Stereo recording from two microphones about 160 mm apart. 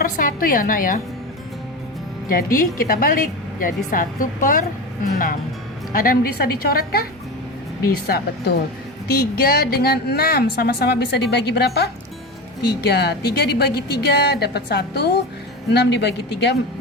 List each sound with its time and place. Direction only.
0.0 s a woman's voice: 60° left (ahead or behind)
2.3 s a woman's voice: 60° left (ahead or behind)
8.0 s a woman's voice: 80° left